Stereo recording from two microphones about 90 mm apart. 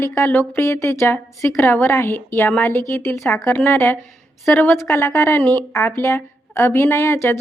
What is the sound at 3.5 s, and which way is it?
A woman's voice, 20° left (ahead or behind).